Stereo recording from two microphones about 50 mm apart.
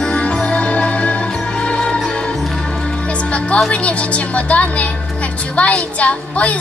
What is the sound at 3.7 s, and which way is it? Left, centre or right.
A woman's voice, left.